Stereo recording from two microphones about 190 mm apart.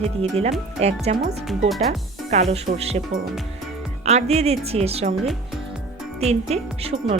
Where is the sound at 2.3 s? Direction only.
35° right (ahead or behind).